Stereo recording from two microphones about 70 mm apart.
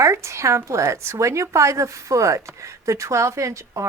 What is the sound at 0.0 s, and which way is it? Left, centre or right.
Speech, right.